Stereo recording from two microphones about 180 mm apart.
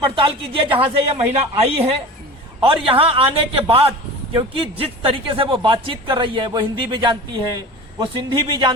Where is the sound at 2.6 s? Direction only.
30° right (ahead or behind).